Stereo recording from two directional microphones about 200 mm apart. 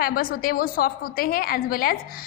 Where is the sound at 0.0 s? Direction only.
45° left (ahead or behind).